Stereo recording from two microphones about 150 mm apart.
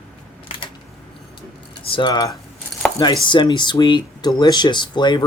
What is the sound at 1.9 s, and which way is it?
Speech, 30° left (ahead or behind).